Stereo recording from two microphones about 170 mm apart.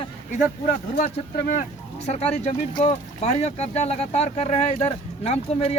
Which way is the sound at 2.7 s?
35° left (ahead or behind).